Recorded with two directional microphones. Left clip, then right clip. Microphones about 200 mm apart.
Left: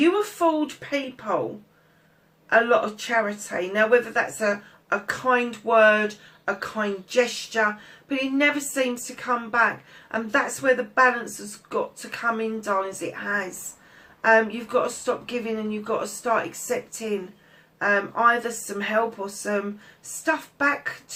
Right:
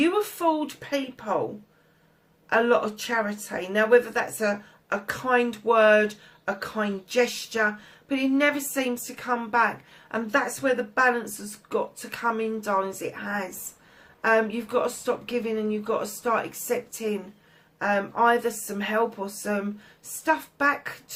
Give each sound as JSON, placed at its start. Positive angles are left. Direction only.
{"t": 0.0, "sound": "speech", "side_deg": -40}
{"t": 2.5, "sound": "speech", "side_deg": -40}